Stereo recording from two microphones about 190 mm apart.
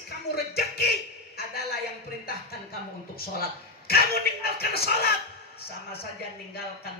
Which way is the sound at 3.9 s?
55° left (ahead or behind).